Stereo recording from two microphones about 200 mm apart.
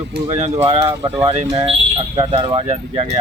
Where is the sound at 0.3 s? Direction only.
35° right (ahead or behind).